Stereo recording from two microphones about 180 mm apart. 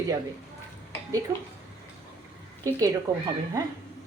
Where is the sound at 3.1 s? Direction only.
15° right (ahead or behind).